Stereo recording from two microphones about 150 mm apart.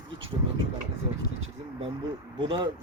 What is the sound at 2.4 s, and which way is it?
Speech, 30° right (ahead or behind).